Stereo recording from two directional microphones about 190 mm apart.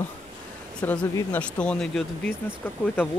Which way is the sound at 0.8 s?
10° left (ahead or behind).